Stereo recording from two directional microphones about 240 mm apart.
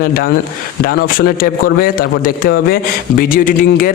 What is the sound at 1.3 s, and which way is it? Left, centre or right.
Speech, left.